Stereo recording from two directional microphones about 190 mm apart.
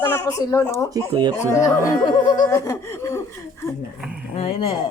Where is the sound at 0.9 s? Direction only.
20° right (ahead or behind).